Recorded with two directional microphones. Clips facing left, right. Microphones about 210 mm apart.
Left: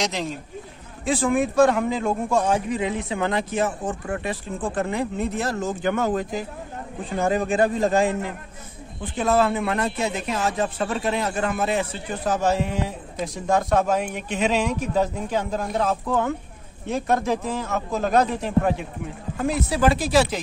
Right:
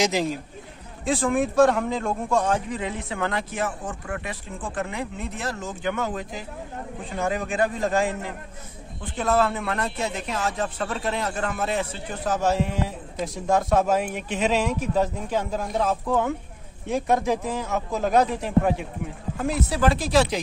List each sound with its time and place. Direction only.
0.0 s a man's voice: 5° right (ahead or behind); by 6.4 s 45° left (ahead or behind)
7.2 s a man's voice: 30° left (ahead or behind); by 20.4 s centre (ahead or behind)